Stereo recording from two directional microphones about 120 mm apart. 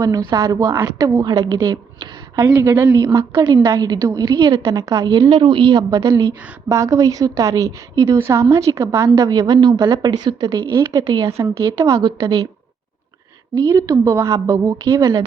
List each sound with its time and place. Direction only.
0.0 s a woman's voice: 30° right (ahead or behind)
3.4 s a woman's voice: 40° right (ahead or behind)
5.3 s a woman's voice: 45° right (ahead or behind)
10.7 s a woman's voice: 25° right (ahead or behind)
11.3 s a woman's voice: 25° right (ahead or behind)
13.6 s a woman's voice: 25° right (ahead or behind)